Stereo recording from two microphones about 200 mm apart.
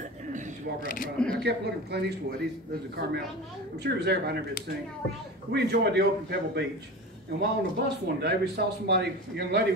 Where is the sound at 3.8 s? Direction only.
55° right (ahead or behind).